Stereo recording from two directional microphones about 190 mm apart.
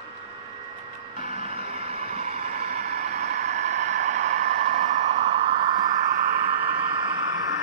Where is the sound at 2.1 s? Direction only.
35° right (ahead or behind).